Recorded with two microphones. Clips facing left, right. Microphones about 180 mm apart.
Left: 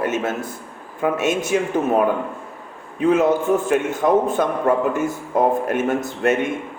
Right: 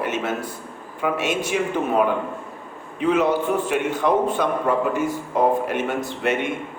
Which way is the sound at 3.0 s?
45° left (ahead or behind).